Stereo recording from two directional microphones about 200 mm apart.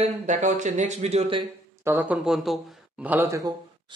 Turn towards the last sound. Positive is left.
turn(degrees=-15)  # may be behind; listen again after turning